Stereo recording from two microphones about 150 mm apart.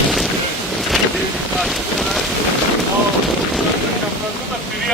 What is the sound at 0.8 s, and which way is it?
Boat, centre (ahead or behind).